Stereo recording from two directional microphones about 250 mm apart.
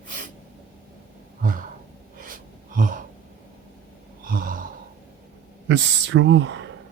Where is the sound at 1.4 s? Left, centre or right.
Right.